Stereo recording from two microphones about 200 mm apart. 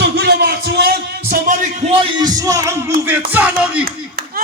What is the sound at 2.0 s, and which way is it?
Speech, 20° right (ahead or behind).